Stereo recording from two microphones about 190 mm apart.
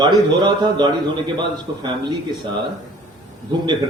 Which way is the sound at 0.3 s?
25° right (ahead or behind).